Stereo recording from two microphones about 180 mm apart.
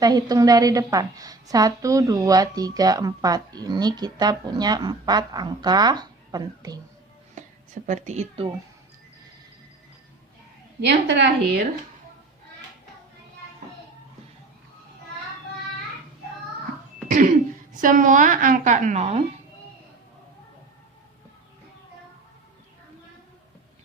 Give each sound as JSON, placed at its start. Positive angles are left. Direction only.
{"t": 0.0, "sound": "a woman's voice", "side_deg": -20}
{"t": 7.4, "sound": "a sound", "side_deg": -40}
{"t": 7.9, "sound": "speech", "side_deg": -40}
{"t": 10.8, "sound": "a woman's voice", "side_deg": -70}
{"t": 17.1, "sound": "a woman's voice", "side_deg": -45}